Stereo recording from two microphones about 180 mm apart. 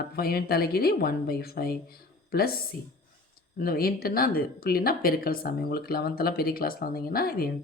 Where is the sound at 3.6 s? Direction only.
55° left (ahead or behind).